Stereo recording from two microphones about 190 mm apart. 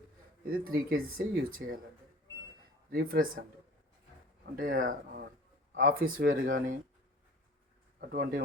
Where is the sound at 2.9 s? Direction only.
50° right (ahead or behind).